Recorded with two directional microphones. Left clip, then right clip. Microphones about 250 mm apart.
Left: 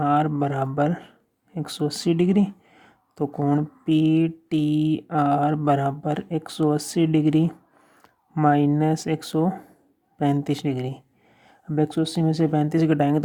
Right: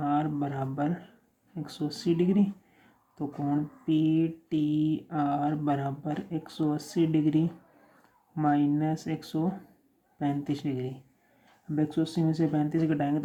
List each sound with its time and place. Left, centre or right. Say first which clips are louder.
0.0 s speech: left 8 dB; left